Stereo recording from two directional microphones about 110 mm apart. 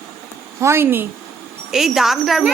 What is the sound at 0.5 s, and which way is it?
Speech, 25° right (ahead or behind).